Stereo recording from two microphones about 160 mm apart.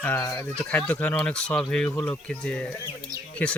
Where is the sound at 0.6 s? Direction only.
5° left (ahead or behind).